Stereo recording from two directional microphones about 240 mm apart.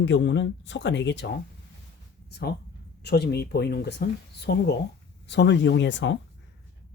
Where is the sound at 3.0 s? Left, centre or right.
Left.